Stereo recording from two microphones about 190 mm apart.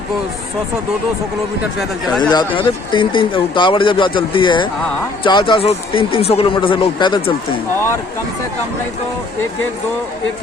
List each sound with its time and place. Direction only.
2.3 s speech: 25° left (ahead or behind)